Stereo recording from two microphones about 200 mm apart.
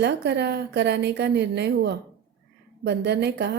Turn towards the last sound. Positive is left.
turn(degrees=-60)  # may be behind; listen again after turning